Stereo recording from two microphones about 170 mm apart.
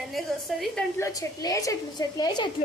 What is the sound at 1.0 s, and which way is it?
A woman's voice, 20° left (ahead or behind).